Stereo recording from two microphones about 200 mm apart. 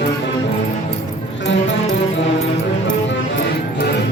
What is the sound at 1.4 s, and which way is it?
Music, 65° left (ahead or behind).